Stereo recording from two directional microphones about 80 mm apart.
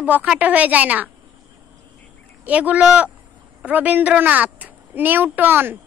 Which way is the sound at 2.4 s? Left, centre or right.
Centre.